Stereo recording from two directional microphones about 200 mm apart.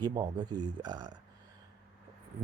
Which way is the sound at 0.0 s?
20° right (ahead or behind).